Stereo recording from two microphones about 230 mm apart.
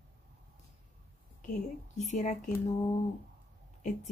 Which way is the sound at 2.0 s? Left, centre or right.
Left.